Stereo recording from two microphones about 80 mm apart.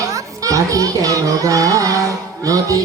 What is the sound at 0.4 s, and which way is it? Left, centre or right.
A child's voice, right.